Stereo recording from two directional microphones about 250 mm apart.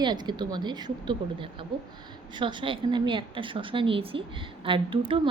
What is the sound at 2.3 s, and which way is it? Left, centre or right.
A woman's voice, centre.